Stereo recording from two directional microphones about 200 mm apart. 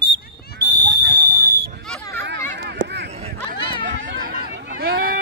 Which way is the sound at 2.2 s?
55° right (ahead or behind).